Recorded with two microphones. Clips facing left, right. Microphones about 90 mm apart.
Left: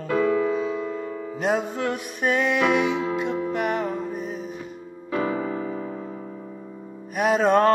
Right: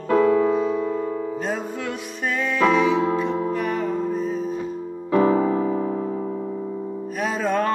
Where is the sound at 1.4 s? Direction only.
65° left (ahead or behind).